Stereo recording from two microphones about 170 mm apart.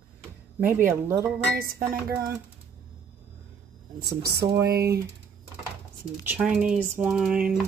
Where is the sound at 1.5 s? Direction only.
60° right (ahead or behind).